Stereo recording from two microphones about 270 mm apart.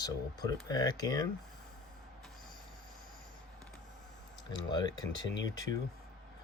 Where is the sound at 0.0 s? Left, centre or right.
Centre.